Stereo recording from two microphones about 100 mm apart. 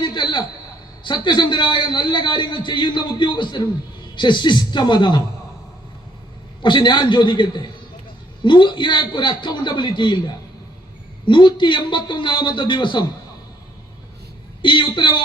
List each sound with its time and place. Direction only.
0.0 s a sound: 50° left (ahead or behind)
1.0 s a man's voice: 50° left (ahead or behind)
6.6 s a man's voice: 50° left (ahead or behind)
14.6 s a man's voice: 55° left (ahead or behind)